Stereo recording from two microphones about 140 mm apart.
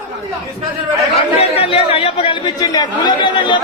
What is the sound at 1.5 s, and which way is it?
Speech, 45° left (ahead or behind).